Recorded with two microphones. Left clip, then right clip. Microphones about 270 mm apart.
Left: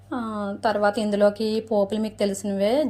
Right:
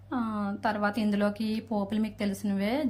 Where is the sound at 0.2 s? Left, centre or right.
Right.